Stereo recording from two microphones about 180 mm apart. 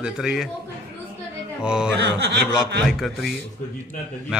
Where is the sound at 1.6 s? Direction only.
5° right (ahead or behind).